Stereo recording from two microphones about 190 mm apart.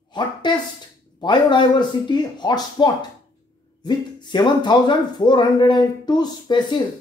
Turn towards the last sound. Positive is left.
turn(degrees=25)  # may be behind; listen again after turning